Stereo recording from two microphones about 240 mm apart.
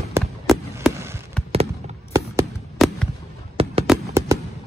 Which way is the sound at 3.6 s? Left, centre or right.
Right.